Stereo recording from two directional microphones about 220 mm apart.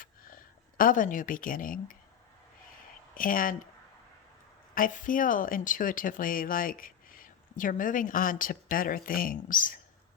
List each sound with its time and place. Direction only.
0.8 s speech: 40° left (ahead or behind)
3.2 s speech: 40° left (ahead or behind)
4.7 s speech: 35° left (ahead or behind)